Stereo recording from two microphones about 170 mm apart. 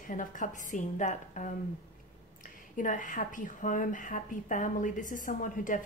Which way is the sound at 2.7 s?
50° left (ahead or behind).